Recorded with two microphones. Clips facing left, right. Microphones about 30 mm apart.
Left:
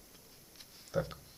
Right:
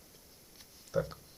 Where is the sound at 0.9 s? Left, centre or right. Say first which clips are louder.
Right 2 dB; centre.